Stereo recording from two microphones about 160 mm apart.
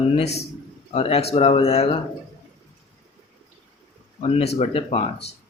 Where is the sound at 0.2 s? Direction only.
40° left (ahead or behind).